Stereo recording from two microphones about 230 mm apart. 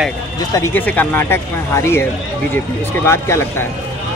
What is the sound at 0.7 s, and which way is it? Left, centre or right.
Speech, centre.